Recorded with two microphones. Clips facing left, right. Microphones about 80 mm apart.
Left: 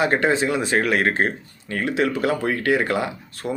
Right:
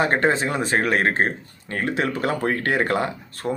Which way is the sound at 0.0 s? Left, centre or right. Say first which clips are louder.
Left 1 dB; right.